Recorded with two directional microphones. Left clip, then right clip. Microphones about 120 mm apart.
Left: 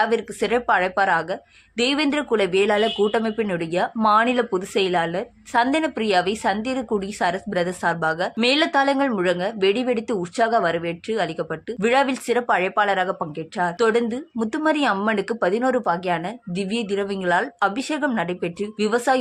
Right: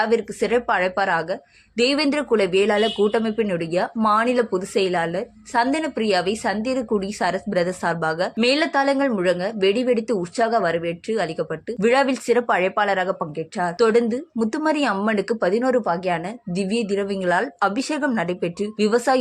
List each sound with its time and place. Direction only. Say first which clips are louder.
0.0 s speech: right 1 dB; 25° right (ahead or behind)